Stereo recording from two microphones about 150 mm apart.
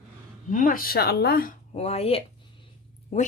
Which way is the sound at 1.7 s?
45° left (ahead or behind).